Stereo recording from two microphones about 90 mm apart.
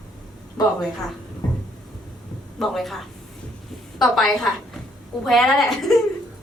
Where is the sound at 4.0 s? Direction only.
Centre (ahead or behind).